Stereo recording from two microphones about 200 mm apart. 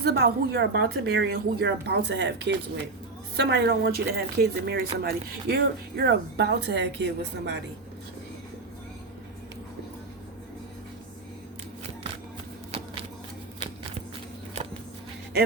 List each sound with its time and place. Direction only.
0.0 s speech: 50° right (ahead or behind)